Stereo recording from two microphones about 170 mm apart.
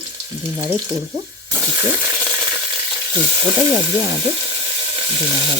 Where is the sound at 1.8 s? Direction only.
10° right (ahead or behind).